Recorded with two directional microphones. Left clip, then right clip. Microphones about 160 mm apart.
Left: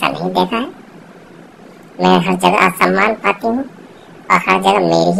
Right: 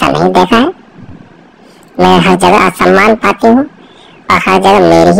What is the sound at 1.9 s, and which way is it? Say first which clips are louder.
A woman's voice: right 7 dB; 55° right (ahead or behind).